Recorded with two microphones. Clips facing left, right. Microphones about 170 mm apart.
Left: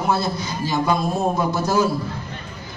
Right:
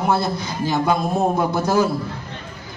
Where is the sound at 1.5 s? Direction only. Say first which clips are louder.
Right 1 dB; 60° right (ahead or behind).